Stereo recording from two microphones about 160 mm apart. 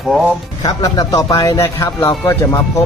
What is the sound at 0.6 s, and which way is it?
Speech, 25° left (ahead or behind).